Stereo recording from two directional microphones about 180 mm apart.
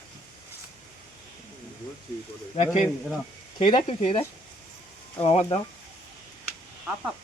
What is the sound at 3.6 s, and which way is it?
Speech, 30° left (ahead or behind).